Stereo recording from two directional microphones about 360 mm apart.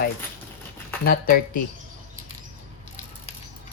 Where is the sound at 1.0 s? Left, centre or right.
Left.